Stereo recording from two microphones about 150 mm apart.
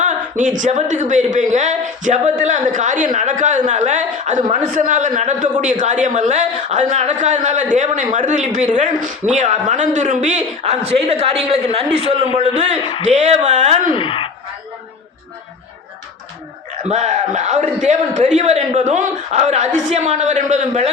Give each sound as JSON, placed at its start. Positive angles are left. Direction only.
{"t": 0.0, "sound": "a man's voice", "side_deg": -55}
{"t": 13.9, "sound": "speech", "side_deg": 35}
{"t": 16.8, "sound": "a man's voice", "side_deg": -50}